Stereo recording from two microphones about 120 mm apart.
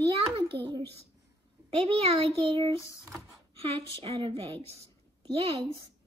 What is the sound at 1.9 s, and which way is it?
Speech, 55° right (ahead or behind).